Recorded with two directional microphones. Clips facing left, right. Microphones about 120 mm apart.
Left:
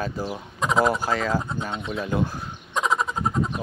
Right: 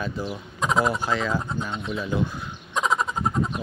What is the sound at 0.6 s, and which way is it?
Speech, centre (ahead or behind).